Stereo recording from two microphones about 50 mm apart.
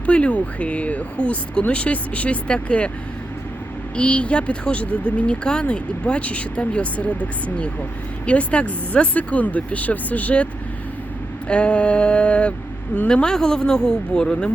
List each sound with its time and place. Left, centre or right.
0.0 s speech: left
3.9 s speech: left